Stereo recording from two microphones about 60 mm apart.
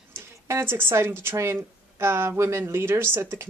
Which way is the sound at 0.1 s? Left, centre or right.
Right.